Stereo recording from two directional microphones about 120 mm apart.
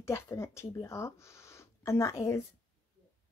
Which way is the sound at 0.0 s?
25° left (ahead or behind).